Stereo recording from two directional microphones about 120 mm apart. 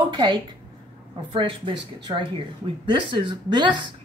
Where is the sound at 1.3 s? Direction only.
50° right (ahead or behind).